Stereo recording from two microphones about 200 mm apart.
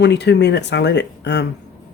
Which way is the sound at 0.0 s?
60° left (ahead or behind).